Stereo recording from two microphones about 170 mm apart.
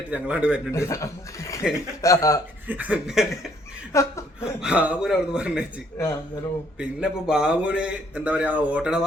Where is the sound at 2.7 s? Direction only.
10° right (ahead or behind).